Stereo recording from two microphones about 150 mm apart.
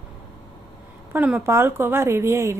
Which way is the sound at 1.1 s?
10° right (ahead or behind).